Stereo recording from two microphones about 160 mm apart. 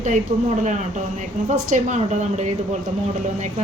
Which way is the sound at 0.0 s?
50° right (ahead or behind).